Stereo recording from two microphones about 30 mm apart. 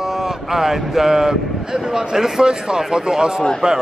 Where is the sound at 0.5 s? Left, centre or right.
Centre.